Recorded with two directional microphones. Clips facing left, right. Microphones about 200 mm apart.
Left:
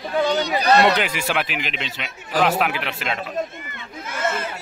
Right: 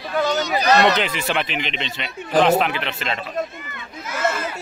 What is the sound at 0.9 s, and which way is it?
A man's voice, 10° left (ahead or behind).